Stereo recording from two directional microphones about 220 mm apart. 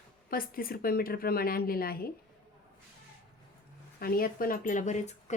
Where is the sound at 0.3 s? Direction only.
40° left (ahead or behind).